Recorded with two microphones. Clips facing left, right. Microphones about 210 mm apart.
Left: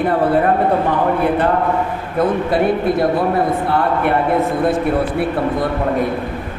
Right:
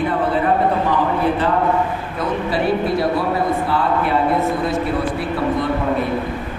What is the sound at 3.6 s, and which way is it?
Speech, 60° left (ahead or behind).